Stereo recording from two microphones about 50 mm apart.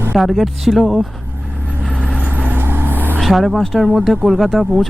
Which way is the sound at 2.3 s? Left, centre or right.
Right.